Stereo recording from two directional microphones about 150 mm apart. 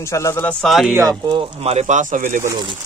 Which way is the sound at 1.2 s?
30° right (ahead or behind).